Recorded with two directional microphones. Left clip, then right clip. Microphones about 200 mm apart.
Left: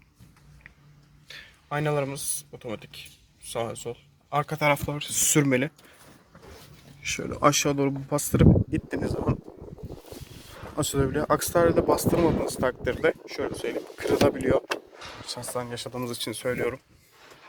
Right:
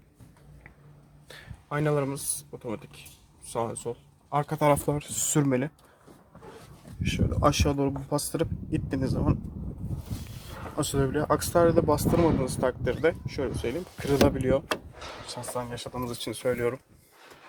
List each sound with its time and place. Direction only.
1.7 s speech: 10° right (ahead or behind)
4.6 s speech: 25° right (ahead or behind)
4.9 s speech: centre (ahead or behind)
7.0 s speech: 15° left (ahead or behind)
10.8 s speech: 10° left (ahead or behind)
16.3 s speech: 5° right (ahead or behind)